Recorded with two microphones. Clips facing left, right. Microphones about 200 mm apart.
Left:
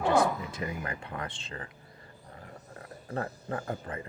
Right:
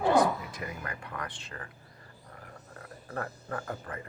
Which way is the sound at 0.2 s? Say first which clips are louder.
Right 1 dB; 25° left (ahead or behind).